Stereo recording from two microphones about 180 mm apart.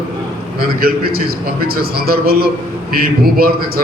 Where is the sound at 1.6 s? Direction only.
60° right (ahead or behind).